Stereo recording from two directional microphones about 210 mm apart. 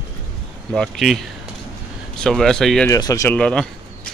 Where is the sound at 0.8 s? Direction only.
Centre (ahead or behind).